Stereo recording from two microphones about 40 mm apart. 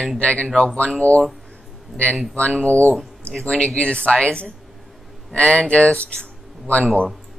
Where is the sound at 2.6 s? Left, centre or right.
Left.